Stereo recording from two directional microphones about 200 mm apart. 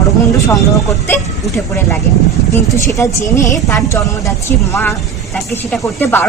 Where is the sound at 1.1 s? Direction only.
10° left (ahead or behind).